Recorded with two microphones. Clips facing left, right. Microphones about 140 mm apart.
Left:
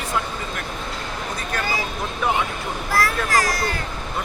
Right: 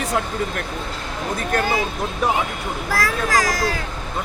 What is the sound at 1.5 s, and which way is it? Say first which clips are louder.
Speech: right 6 dB; 50° right (ahead or behind).